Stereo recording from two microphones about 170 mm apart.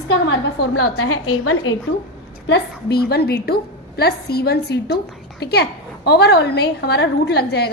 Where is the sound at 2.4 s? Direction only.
80° left.